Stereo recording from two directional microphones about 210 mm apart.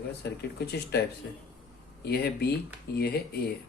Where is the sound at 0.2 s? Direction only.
50° left (ahead or behind).